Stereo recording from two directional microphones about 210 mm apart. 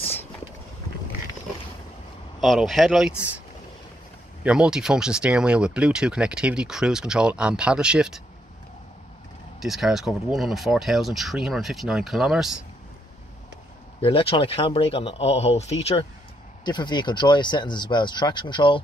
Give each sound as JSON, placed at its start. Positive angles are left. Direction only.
{"t": 2.4, "sound": "speech", "side_deg": 0}
{"t": 4.4, "sound": "speech", "side_deg": -5}
{"t": 9.6, "sound": "speech", "side_deg": 0}
{"t": 14.0, "sound": "speech", "side_deg": 25}